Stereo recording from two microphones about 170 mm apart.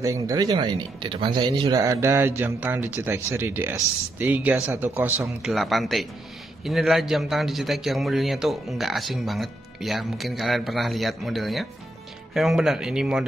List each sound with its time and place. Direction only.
0.0 s a man's voice: 20° right (ahead or behind); by 13.3 s 5° right (ahead or behind)